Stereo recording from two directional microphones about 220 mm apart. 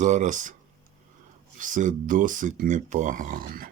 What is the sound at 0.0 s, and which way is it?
Speech, 35° right (ahead or behind).